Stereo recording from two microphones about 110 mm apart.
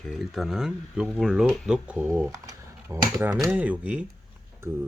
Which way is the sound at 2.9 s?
30° right (ahead or behind).